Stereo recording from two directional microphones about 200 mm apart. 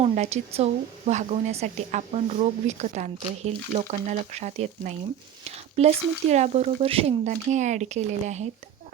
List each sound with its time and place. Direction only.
0.0 s a woman's voice: 30° right (ahead or behind)
5.5 s a sound: 30° right (ahead or behind)
6.3 s a woman's voice: 35° right (ahead or behind)